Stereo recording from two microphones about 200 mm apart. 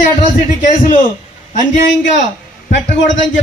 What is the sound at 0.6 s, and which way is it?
Speech, 40° left (ahead or behind).